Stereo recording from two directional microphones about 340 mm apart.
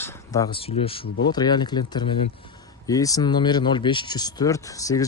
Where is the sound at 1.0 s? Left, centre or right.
Left.